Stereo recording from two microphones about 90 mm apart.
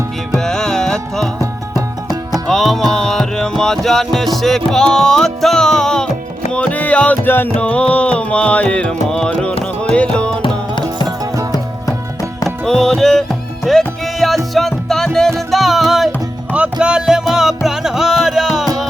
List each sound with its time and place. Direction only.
0.3 s music: 5° left (ahead or behind)
2.5 s music: 5° left (ahead or behind); by 7.5 s 25° left (ahead or behind)
7.6 s music: 10° left (ahead or behind)
12.6 s music: 5° left (ahead or behind)
16.5 s music: 10° right (ahead or behind)